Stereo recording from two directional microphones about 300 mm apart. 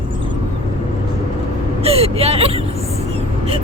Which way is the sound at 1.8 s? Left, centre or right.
Centre.